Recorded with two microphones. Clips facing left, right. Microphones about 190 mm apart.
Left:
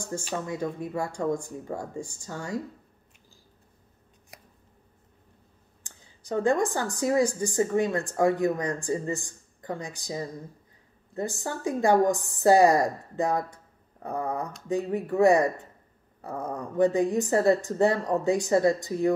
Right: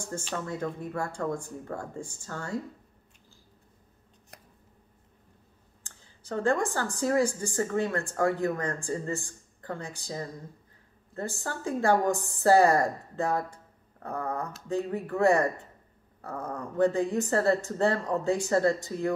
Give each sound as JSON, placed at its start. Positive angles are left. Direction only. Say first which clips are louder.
{"t": 0.0, "sound": "speech", "louder": "left 2 dB", "side_deg": 10}
{"t": 5.9, "sound": "speech", "louder": "left 4 dB", "side_deg": 15}